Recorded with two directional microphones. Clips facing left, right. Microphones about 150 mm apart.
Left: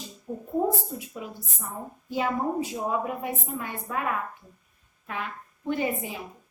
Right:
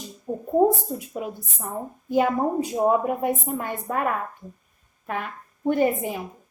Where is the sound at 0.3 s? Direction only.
40° right (ahead or behind).